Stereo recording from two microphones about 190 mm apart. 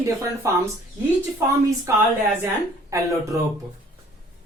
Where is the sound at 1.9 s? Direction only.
15° right (ahead or behind).